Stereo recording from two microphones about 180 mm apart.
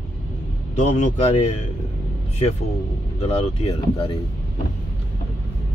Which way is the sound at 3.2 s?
35° left (ahead or behind).